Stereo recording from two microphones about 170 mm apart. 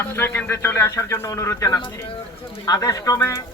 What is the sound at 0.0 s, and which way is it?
A man's voice, 10° left (ahead or behind).